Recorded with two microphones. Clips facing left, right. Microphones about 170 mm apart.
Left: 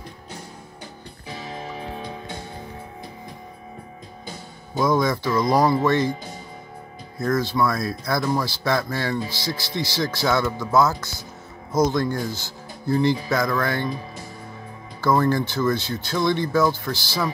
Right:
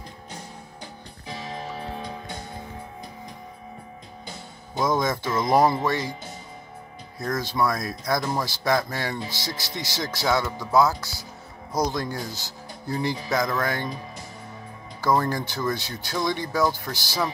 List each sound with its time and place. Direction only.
4.7 s speech: 20° right (ahead or behind)
7.2 s speech: 15° right (ahead or behind)
15.0 s speech: 15° right (ahead or behind)